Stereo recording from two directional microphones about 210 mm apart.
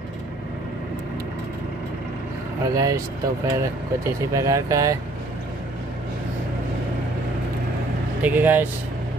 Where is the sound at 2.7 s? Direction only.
15° right (ahead or behind).